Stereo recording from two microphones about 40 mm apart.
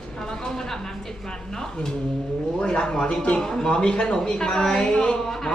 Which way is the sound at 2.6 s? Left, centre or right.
Centre.